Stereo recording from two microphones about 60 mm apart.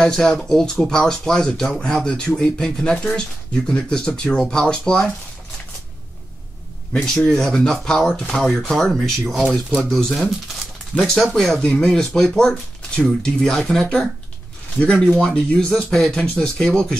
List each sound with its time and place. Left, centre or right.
0.0 s speech: centre
7.0 s speech: centre
9.2 s speech: centre
9.8 s speech: centre
11.6 s speech: centre
14.8 s speech: centre